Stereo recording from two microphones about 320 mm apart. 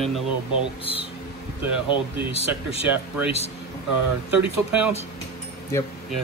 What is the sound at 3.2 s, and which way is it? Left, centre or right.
Speech, centre.